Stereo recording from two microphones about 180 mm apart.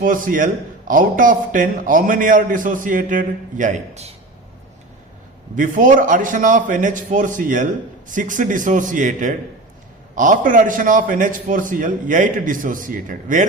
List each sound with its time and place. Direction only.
0.0 s a man's voice: 50° right (ahead or behind)
5.5 s a man's voice: 45° right (ahead or behind)